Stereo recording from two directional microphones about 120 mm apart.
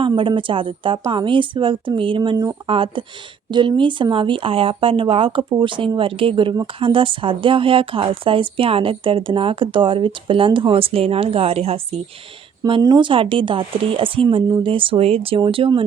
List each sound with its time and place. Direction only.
0.2 s speech: 45° right (ahead or behind)
12.8 s speech: 35° right (ahead or behind)